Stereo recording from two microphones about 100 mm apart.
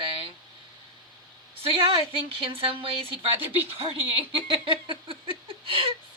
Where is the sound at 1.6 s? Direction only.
70° right (ahead or behind).